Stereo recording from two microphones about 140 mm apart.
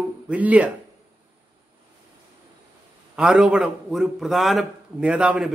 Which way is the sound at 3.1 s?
5° right (ahead or behind).